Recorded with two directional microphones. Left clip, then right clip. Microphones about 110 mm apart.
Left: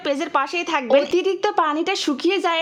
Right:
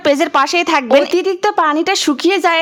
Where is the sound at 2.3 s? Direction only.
25° right (ahead or behind).